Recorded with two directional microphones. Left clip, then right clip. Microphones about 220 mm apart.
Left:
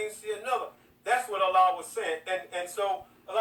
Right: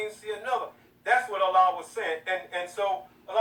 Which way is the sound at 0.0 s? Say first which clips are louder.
Right 1 dB; 20° left (ahead or behind).